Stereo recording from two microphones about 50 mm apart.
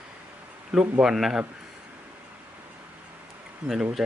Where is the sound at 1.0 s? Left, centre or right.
Centre.